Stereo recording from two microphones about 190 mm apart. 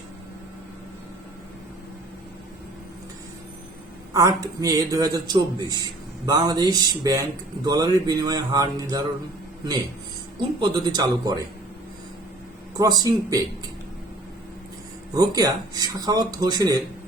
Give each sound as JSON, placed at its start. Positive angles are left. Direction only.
{"t": 4.1, "sound": "a man's voice", "side_deg": -20}
{"t": 10.6, "sound": "a man's voice", "side_deg": -20}
{"t": 12.7, "sound": "a man's voice", "side_deg": -20}
{"t": 15.1, "sound": "a man's voice", "side_deg": -20}